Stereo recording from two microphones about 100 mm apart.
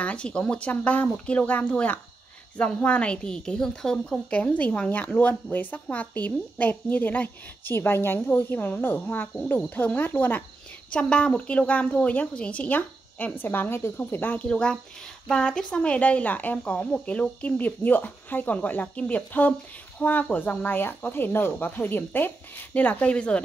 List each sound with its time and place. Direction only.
0.0 s a woman's voice: 10° left (ahead or behind)